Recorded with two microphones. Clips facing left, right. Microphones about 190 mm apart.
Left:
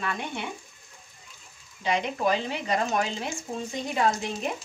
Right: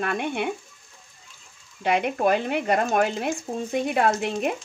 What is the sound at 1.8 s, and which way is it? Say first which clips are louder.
Speech: right 4 dB; 55° right (ahead or behind).